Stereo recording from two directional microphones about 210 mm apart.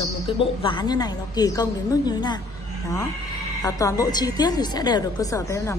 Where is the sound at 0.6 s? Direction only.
25° left (ahead or behind).